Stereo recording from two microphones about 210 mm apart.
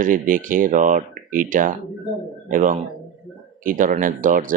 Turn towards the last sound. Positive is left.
turn(degrees=-40)  # may be behind; listen again after turning